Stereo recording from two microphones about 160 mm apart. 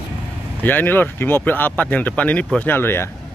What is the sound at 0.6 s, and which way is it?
A man's voice, 10° left (ahead or behind).